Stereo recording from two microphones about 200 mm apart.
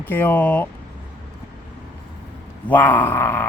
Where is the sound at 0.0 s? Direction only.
10° left (ahead or behind).